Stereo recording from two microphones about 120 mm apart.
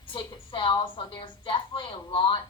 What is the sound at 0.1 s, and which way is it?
A woman's voice, 40° left (ahead or behind).